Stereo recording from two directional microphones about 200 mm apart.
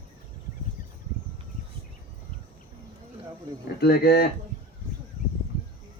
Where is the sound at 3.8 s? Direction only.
50° left (ahead or behind).